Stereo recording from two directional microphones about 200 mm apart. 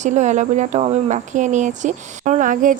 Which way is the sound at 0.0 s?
35° right (ahead or behind).